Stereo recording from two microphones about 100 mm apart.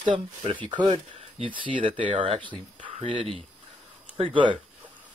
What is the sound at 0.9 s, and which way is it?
Speech, 85° right.